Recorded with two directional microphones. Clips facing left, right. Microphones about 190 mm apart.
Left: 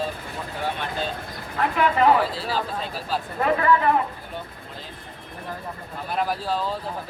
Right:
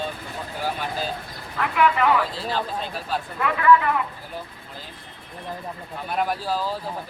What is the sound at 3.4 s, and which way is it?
Speech, 35° left (ahead or behind).